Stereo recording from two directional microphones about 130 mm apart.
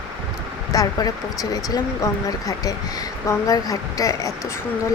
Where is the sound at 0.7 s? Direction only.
30° left (ahead or behind).